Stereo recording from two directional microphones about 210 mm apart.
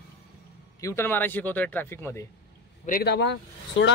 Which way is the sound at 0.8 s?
15° left (ahead or behind).